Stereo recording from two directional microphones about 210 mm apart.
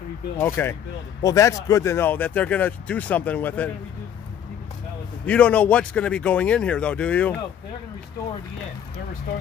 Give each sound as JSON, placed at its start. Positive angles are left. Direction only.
{"t": 0.4, "sound": "speech", "side_deg": 10}
{"t": 5.2, "sound": "speech", "side_deg": 5}